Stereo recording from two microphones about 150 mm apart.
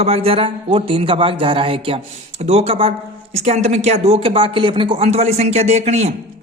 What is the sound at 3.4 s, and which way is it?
Speech, 50° right (ahead or behind).